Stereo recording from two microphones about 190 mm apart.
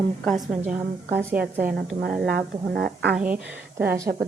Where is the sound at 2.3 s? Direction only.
55° right (ahead or behind).